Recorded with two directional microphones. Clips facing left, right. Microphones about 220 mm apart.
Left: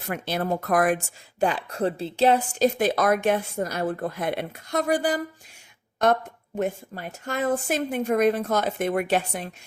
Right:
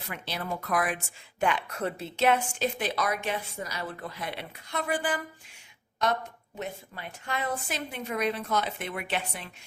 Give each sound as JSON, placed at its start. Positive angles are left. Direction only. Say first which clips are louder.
{"t": 0.1, "sound": "speech", "louder": "left 9 dB", "side_deg": 50}
{"t": 6.6, "sound": "speech", "louder": "left 10 dB", "side_deg": 45}